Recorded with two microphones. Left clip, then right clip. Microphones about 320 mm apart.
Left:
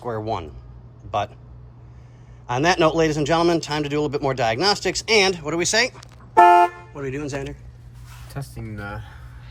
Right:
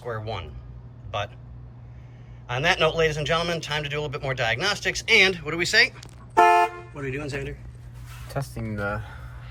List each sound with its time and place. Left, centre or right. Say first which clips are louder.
0.1 s a man's voice: left 6 dB; centre
2.5 s a man's voice: left 4 dB; centre
6.3 s car: left 5 dB; left
6.9 s a man's voice: left 3 dB; centre
8.3 s speech: right 5 dB; centre